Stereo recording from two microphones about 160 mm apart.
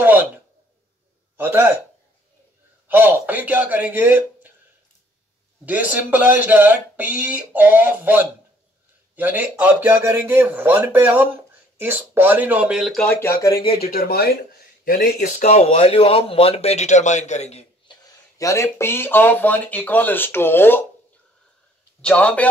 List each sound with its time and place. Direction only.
1.3 s a man's voice: 15° right (ahead or behind)
2.9 s speech: 10° right (ahead or behind)
5.7 s speech: 10° right (ahead or behind); by 13.7 s 25° left (ahead or behind)
13.7 s speech: 70° left (ahead or behind)
15.2 s speech: 45° left (ahead or behind)
17.8 s speech: 20° left (ahead or behind)
22.0 s speech: 10° left (ahead or behind)